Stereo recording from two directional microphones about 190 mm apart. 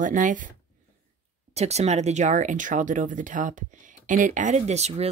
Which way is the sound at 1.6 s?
35° right (ahead or behind).